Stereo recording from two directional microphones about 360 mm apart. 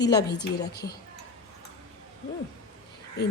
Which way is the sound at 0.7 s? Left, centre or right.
Left.